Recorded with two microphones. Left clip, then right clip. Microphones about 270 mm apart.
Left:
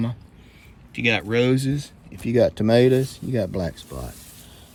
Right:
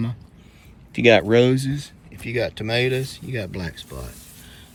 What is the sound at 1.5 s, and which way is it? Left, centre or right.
Speech, centre.